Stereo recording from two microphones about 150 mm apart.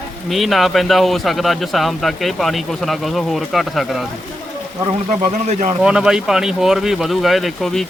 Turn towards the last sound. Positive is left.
turn(degrees=0)  # may be behind; listen again after turning